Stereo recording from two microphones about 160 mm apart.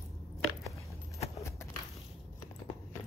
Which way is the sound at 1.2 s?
20° left (ahead or behind).